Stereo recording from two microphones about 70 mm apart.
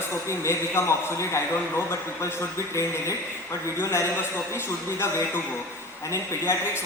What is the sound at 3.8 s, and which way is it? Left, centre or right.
A man's voice, left.